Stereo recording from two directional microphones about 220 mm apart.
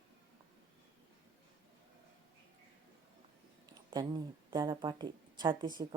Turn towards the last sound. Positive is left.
turn(degrees=-20)  # may be behind; listen again after turning